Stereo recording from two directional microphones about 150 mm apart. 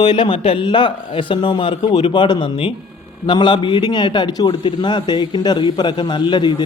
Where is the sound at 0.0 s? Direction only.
30° left (ahead or behind).